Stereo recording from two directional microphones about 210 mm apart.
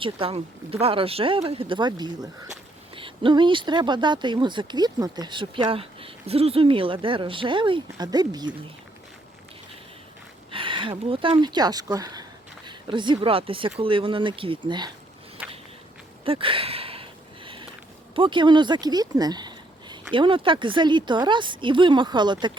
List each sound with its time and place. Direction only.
0.0 s speech: 25° right (ahead or behind)
10.5 s speech: 25° right (ahead or behind)
16.2 s a sound: 25° right (ahead or behind)
18.1 s speech: 25° right (ahead or behind)